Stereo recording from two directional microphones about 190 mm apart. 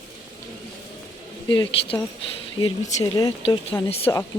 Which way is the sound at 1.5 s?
25° left (ahead or behind).